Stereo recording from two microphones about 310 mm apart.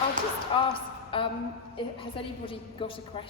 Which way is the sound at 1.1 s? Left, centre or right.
Centre.